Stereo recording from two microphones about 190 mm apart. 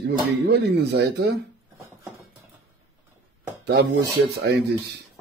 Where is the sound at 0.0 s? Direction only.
60° right (ahead or behind).